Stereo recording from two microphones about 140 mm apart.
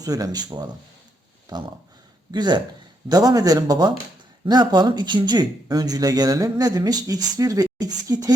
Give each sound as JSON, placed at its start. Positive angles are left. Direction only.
{"t": 0.0, "sound": "speech", "side_deg": -25}